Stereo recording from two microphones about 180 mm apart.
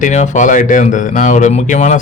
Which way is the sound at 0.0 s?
40° left (ahead or behind).